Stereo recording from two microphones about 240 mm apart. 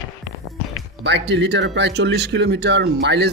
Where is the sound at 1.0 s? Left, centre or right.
Right.